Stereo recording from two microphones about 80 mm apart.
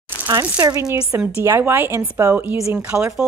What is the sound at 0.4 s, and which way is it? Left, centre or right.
Speech, right.